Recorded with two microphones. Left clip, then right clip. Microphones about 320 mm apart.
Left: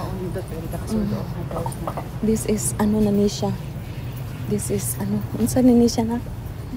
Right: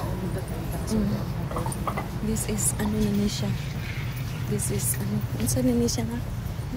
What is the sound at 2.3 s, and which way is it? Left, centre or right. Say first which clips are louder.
A woman's voice: left 11 dB; centre.